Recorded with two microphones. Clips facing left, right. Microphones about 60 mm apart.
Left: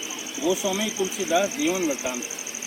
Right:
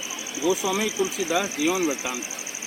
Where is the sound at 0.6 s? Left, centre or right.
Right.